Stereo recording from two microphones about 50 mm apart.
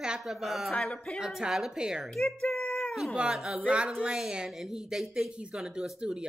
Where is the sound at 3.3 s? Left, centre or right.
Centre.